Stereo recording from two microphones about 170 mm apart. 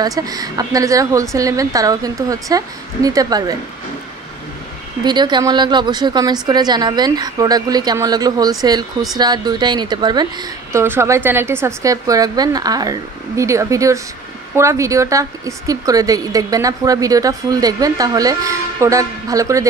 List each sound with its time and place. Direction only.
0.0 s a woman's voice: 20° right (ahead or behind)
5.0 s a woman's voice: 25° right (ahead or behind)